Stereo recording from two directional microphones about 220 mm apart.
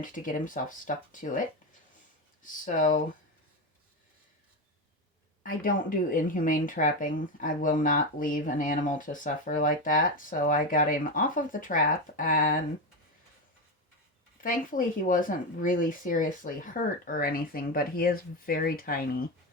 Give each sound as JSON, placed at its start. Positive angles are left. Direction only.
{"t": 0.0, "sound": "a woman's voice", "side_deg": 35}
{"t": 5.4, "sound": "a woman's voice", "side_deg": 40}
{"t": 14.4, "sound": "a woman's voice", "side_deg": 40}